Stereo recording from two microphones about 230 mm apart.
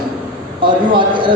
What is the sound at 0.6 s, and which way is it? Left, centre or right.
Speech, right.